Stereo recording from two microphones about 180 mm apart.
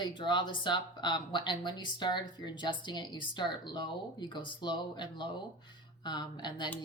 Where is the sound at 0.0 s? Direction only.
25° left (ahead or behind).